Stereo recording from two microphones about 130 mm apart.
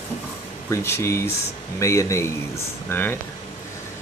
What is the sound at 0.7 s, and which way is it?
Speech, 20° left (ahead or behind).